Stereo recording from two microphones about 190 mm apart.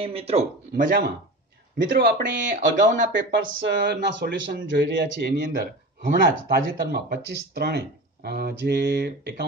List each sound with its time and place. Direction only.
0.0 s speech: 30° right (ahead or behind)
1.8 s speech: 65° right (ahead or behind)
2.5 s speech: 45° right (ahead or behind)
3.2 s speech: 70° right (ahead or behind)